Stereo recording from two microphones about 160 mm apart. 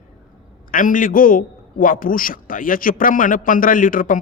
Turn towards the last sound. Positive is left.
turn(degrees=60)  # may be behind; listen again after turning